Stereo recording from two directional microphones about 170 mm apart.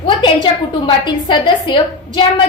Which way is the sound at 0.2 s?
30° left (ahead or behind).